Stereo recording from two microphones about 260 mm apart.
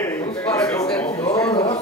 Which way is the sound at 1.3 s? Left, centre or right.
Centre.